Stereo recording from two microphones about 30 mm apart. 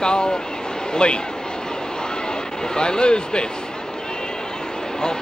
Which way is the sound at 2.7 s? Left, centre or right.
Left.